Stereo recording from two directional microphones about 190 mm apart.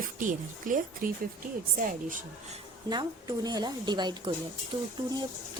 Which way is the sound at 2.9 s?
20° right (ahead or behind).